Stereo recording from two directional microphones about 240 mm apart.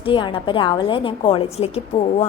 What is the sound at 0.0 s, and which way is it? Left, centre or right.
A woman's voice, left.